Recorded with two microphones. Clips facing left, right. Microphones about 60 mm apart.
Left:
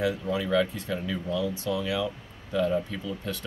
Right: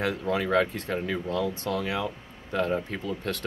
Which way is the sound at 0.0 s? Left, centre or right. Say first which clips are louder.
Right 1 dB; right.